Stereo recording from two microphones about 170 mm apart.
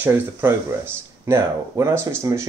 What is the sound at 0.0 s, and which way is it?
Speech, 15° right (ahead or behind).